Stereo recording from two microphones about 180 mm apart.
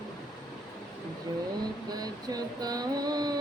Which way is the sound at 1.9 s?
20° right (ahead or behind).